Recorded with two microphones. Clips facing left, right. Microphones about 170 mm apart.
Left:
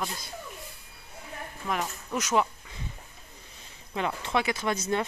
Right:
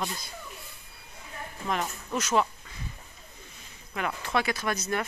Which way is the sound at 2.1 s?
15° left (ahead or behind).